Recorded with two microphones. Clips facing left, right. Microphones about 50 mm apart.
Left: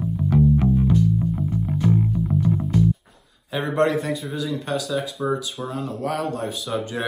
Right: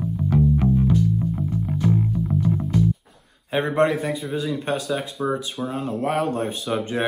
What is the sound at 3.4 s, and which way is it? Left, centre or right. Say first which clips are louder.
Speech: right 3 dB; right.